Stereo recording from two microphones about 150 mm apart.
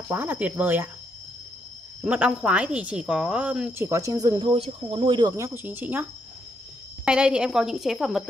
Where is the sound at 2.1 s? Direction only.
10° right (ahead or behind); by 5.3 s 30° right (ahead or behind).